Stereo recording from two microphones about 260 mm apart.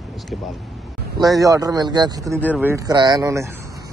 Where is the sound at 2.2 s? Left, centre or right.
Centre.